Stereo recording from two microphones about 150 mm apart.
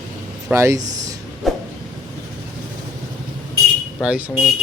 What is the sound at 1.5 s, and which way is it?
Vehicle, centre (ahead or behind).